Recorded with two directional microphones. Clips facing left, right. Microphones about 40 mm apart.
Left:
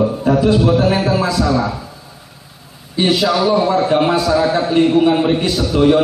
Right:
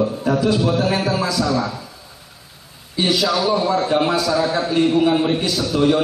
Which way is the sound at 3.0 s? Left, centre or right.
Left.